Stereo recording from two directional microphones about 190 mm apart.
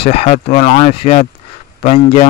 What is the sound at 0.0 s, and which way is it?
Speech, 30° left (ahead or behind).